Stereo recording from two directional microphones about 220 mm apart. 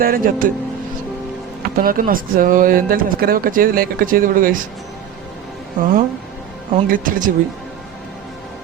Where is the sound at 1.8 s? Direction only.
40° right (ahead or behind).